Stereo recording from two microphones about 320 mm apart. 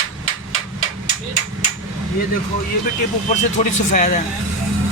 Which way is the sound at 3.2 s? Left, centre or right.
Left.